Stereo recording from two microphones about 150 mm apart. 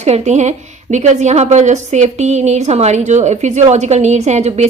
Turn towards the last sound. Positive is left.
turn(degrees=-50)  # may be behind; listen again after turning